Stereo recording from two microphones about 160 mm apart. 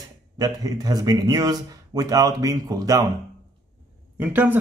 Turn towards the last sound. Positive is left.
turn(degrees=-10)  # may be behind; listen again after turning